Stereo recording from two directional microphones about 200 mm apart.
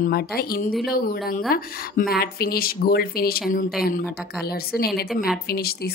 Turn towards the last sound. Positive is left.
turn(degrees=50)  # may be behind; listen again after turning